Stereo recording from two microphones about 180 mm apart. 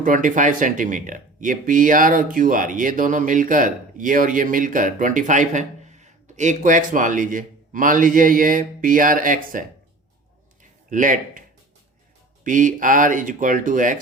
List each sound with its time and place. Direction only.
0.0 s speech: 45° right (ahead or behind)
10.6 s a sound: 45° right (ahead or behind)
12.5 s speech: 45° right (ahead or behind)